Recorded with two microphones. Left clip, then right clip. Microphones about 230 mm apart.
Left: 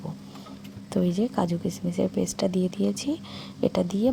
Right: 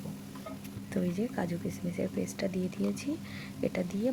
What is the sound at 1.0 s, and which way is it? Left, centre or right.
Speech, left.